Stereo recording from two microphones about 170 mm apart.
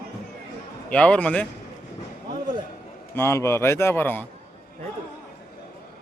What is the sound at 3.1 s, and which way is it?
A man's voice, 15° left (ahead or behind).